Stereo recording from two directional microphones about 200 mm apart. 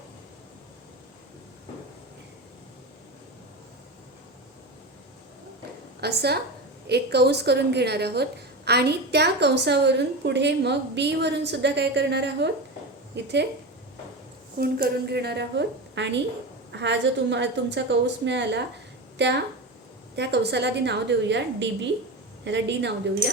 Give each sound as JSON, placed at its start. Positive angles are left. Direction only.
{"t": 6.0, "sound": "a woman's voice", "side_deg": -55}
{"t": 14.6, "sound": "a woman's voice", "side_deg": -50}